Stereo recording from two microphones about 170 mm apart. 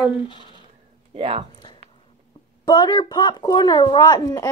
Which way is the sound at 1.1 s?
35° right (ahead or behind).